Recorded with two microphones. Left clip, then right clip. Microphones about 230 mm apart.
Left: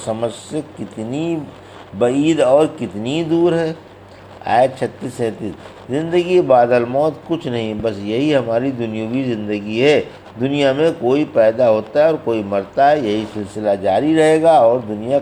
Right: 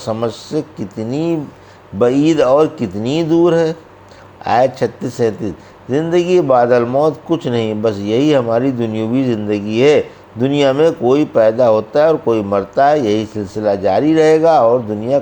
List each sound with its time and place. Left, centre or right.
0.0 s a man's voice: right